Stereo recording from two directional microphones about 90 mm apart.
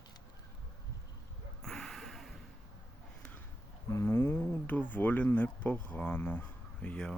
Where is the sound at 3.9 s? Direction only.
30° left (ahead or behind); by 7.1 s 10° left (ahead or behind).